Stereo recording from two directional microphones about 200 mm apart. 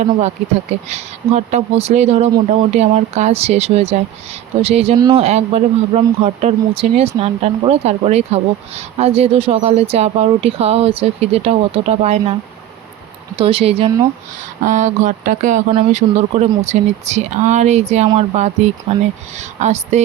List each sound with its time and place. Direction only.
0.9 s speech: 35° right (ahead or behind)
4.9 s speech: 20° right (ahead or behind)
5.2 s speech: 30° right (ahead or behind)
13.3 s speech: 30° right (ahead or behind)